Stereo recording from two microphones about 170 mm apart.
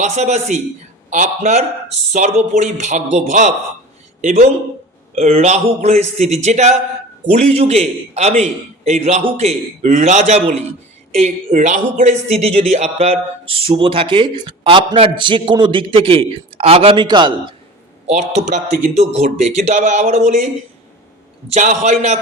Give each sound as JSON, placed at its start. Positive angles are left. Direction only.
{"t": 0.0, "sound": "a man's voice", "side_deg": -45}
{"t": 18.0, "sound": "a man's voice", "side_deg": -40}